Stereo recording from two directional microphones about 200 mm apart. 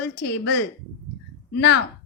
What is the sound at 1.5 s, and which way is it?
Speech, 55° left (ahead or behind).